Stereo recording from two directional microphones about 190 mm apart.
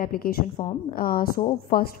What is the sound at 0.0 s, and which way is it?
A woman's voice, 50° left (ahead or behind).